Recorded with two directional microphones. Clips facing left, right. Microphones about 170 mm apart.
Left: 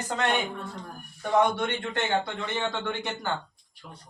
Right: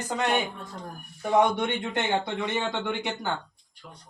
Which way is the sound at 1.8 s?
20° right (ahead or behind).